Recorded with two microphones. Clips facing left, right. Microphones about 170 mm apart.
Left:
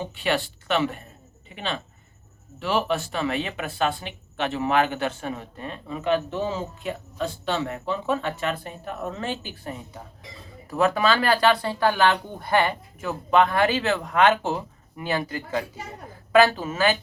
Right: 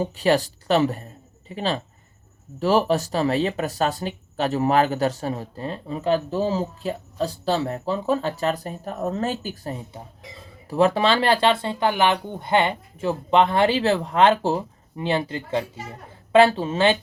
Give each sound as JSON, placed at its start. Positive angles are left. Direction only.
{"t": 0.0, "sound": "speech", "side_deg": -40}
{"t": 10.7, "sound": "speech", "side_deg": -30}